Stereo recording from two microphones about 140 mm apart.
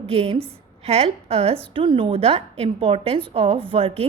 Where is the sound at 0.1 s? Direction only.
45° right (ahead or behind).